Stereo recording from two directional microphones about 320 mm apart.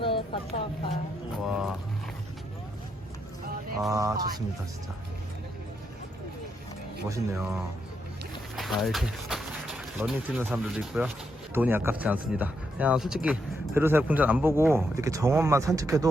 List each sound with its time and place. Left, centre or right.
0.0 s a sound: centre
1.5 s vehicle: centre
3.8 s mantra: centre
7.1 s speech: centre
8.5 s speech: centre